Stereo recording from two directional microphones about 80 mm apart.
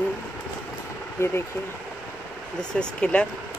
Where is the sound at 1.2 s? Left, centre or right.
Left.